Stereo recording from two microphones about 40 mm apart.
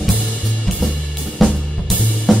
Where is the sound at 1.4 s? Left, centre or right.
Left.